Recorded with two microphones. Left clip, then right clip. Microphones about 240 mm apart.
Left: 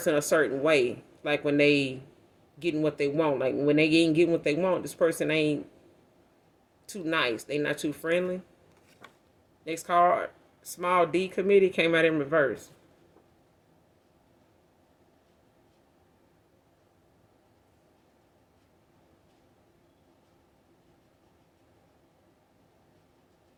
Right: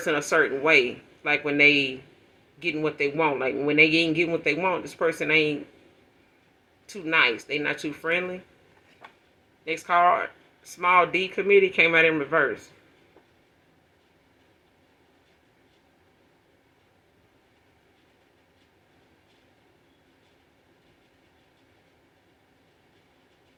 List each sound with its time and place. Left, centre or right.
0.1 s a man's voice: left
7.0 s a man's voice: left
9.6 s a man's voice: left